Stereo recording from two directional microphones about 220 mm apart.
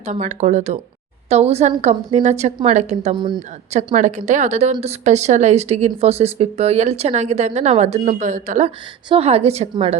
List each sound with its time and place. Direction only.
0.0 s a woman's voice: 35° right (ahead or behind)